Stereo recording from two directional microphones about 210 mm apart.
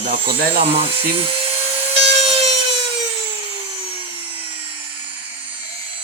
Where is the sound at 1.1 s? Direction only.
25° right (ahead or behind).